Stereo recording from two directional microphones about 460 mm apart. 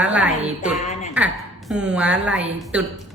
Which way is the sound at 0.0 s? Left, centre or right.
Centre.